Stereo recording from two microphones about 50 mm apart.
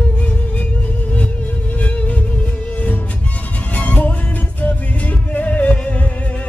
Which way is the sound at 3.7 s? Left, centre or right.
Left.